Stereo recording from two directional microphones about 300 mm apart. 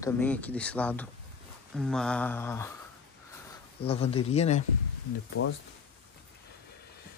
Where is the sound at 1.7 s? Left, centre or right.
Centre.